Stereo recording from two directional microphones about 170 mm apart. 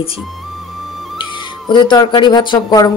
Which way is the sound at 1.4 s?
30° left (ahead or behind).